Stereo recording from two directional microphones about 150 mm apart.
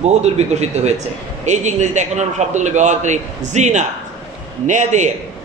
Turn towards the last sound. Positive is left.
turn(degrees=-55)  # may be behind; listen again after turning